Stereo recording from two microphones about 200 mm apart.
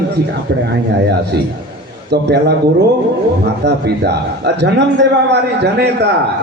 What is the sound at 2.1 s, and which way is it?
Speech, 55° right (ahead or behind).